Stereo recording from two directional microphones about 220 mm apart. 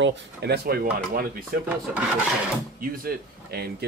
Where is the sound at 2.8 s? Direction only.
40° right (ahead or behind).